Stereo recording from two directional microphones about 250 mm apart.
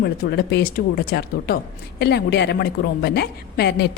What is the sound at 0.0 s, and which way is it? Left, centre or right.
A woman's voice, left.